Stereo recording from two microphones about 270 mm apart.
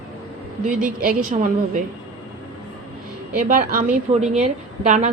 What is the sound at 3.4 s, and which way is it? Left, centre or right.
A woman's voice, right.